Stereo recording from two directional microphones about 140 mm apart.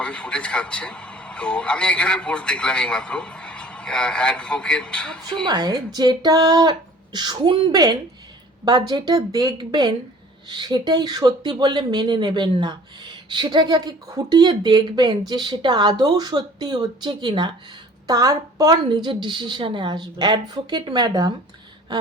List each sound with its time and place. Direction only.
0.0 s a man's voice: 10° left (ahead or behind)
5.5 s speech: 30° right (ahead or behind)